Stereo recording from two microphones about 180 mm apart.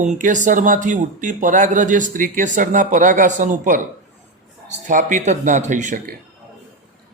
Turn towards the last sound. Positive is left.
turn(degrees=-45)  # may be behind; listen again after turning